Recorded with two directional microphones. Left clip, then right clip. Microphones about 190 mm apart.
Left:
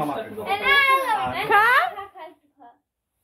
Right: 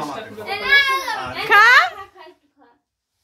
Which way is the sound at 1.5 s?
10° right (ahead or behind).